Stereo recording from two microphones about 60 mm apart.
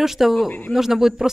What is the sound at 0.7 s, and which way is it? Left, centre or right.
Speech, centre.